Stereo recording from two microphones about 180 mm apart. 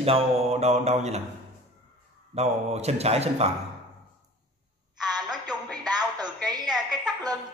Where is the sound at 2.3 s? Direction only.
35° right (ahead or behind).